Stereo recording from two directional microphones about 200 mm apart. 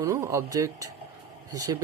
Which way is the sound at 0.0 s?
15° right (ahead or behind).